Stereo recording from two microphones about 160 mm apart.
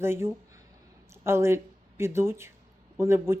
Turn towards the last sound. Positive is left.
turn(degrees=-15)  # may be behind; listen again after turning